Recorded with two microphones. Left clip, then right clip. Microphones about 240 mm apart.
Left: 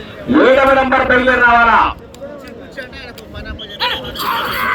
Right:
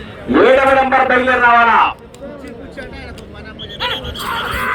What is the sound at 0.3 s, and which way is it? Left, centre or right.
A man's voice, right.